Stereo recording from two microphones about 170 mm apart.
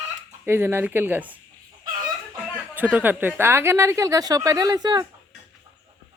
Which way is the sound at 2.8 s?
10° right (ahead or behind).